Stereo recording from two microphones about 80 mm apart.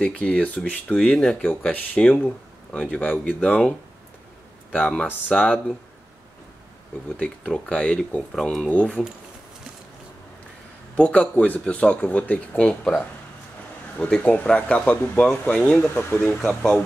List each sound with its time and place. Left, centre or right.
0.0 s speech: centre
4.7 s speech: centre
7.2 s speech: centre
8.6 s speech: centre
11.0 s speech: centre